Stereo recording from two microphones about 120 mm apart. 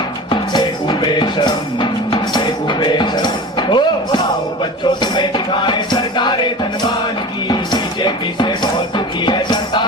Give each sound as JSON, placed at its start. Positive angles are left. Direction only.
{"t": 0.3, "sound": "music", "side_deg": 40}